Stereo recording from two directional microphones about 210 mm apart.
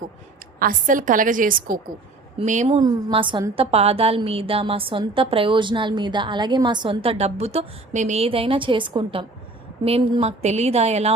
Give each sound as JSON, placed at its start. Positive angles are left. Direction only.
{"t": 0.6, "sound": "speech", "side_deg": -40}
{"t": 2.8, "sound": "a woman's voice", "side_deg": -25}